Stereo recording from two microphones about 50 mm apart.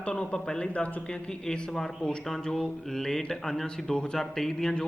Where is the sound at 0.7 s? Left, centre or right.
Left.